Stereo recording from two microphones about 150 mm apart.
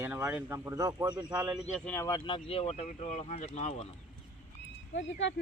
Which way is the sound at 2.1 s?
30° left (ahead or behind).